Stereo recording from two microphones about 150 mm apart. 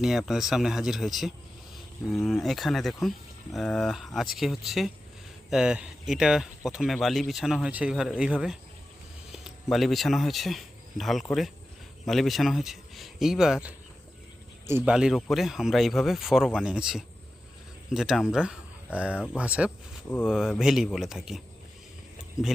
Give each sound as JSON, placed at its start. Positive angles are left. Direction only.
{"t": 0.0, "sound": "speech", "side_deg": 0}
{"t": 14.9, "sound": "speech", "side_deg": -5}